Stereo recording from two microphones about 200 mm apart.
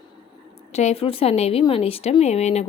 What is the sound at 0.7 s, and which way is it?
Speech, 35° left (ahead or behind).